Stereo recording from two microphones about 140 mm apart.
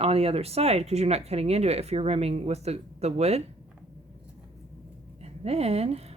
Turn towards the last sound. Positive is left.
turn(degrees=-50)  # may be behind; listen again after turning